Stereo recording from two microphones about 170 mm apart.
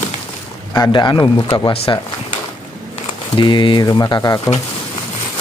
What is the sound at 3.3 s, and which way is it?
Speech, 30° left (ahead or behind).